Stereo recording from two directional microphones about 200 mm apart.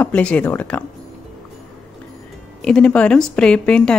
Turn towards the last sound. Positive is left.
turn(degrees=5)  # may be behind; listen again after turning